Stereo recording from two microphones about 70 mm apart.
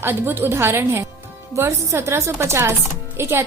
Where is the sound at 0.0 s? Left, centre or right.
Right.